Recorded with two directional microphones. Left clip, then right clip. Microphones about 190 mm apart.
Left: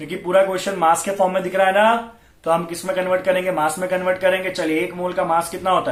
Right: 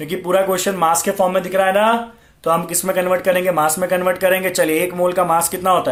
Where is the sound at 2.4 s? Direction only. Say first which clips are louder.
Right 2 dB; 50° right (ahead or behind).